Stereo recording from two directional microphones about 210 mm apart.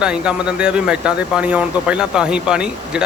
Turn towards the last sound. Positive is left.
turn(degrees=-5)  # may be behind; listen again after turning